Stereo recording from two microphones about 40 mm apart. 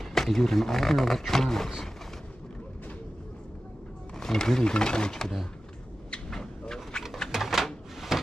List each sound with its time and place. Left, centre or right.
0.0 s speech: centre
4.2 s speech: centre
6.9 s pigeon: left
7.2 s a sound: centre